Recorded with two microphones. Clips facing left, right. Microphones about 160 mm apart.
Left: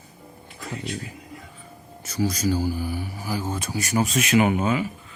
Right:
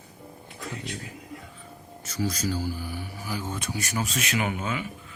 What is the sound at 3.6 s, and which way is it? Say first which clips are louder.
Speech: left 4 dB; 5° left (ahead or behind).